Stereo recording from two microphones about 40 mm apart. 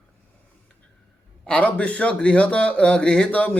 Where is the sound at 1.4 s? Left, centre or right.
Left.